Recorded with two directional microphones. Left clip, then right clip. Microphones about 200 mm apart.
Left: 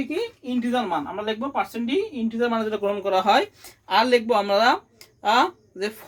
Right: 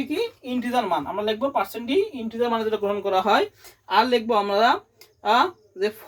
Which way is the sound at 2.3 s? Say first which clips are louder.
Right 1 dB; 20° left (ahead or behind).